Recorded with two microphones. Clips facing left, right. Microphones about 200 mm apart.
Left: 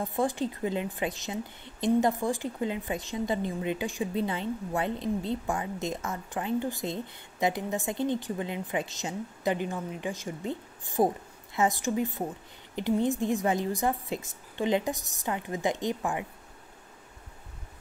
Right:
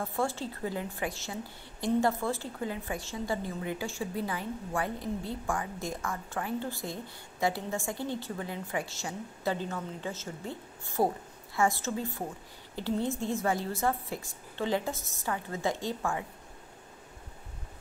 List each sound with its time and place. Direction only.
0.0 s a woman's voice: 15° left (ahead or behind)